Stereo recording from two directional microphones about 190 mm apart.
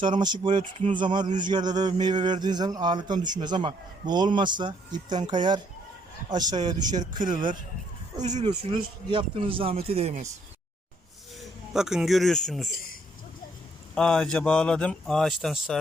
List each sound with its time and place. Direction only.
0.0 s a man's voice: 25° right (ahead or behind)
7.2 s speech: 45° right (ahead or behind)
8.4 s a man's voice: 25° right (ahead or behind)
11.3 s a man's voice: 5° right (ahead or behind)
13.9 s speech: 5° left (ahead or behind)